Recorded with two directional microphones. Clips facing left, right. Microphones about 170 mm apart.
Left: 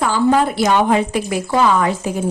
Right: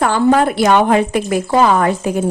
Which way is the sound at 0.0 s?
60° right (ahead or behind).